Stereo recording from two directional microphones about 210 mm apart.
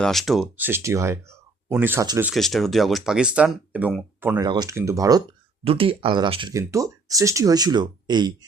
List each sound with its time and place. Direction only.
0.0 s speech: centre (ahead or behind)
2.3 s speech: centre (ahead or behind)
4.4 s speech: 20° right (ahead or behind)
5.6 s speech: 25° right (ahead or behind)